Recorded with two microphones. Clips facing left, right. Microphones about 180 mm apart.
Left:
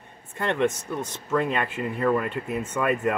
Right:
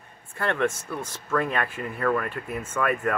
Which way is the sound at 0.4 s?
20° left (ahead or behind).